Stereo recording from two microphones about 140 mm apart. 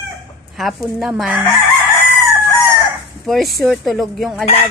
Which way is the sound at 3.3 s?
Centre (ahead or behind).